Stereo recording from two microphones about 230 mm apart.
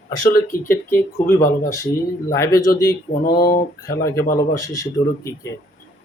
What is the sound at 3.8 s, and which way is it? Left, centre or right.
Speech, centre.